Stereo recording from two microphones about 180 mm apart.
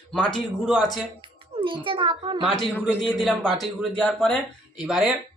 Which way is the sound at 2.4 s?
5° left (ahead or behind).